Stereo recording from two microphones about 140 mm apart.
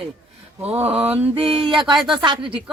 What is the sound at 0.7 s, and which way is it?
Mantra, 10° right (ahead or behind).